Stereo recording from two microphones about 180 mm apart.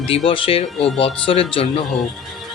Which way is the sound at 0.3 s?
30° left (ahead or behind).